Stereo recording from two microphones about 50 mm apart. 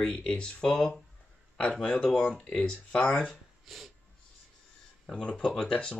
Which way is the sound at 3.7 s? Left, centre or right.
Centre.